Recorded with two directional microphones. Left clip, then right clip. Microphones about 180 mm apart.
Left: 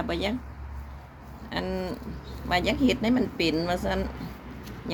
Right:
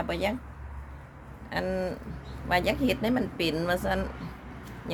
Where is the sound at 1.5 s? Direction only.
20° right (ahead or behind).